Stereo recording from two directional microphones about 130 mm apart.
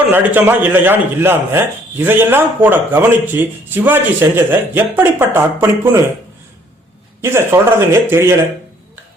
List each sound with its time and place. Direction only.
0.1 s a man's voice: 15° right (ahead or behind)
7.2 s speech: 20° right (ahead or behind)